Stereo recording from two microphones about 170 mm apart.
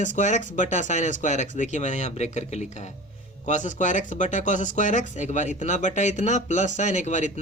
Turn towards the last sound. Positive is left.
turn(degrees=45)  # may be behind; listen again after turning